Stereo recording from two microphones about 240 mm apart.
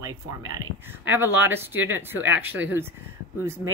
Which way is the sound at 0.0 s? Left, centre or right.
Centre.